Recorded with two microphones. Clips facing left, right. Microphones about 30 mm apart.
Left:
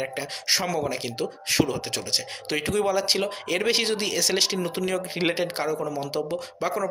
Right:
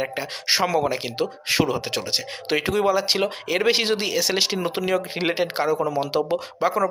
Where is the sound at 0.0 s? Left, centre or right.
Right.